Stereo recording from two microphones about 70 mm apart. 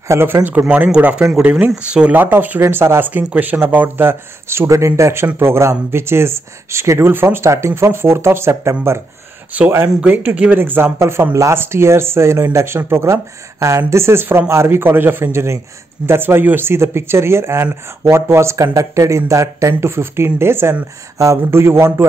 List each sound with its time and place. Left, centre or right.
0.1 s speech: right; by 2.1 s centre
2.1 s speech: right
2.6 s speech: right
10.0 s speech: right
10.6 s speech: right
19.7 s speech: right